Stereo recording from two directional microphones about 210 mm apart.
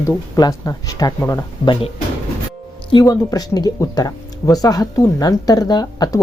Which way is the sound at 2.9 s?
15° left (ahead or behind).